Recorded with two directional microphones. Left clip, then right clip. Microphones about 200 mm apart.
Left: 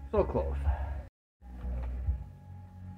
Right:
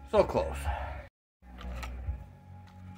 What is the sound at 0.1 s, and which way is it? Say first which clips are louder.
Speech: right 4 dB; 25° right (ahead or behind).